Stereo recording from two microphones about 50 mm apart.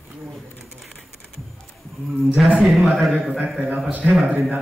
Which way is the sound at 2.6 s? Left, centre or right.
Centre.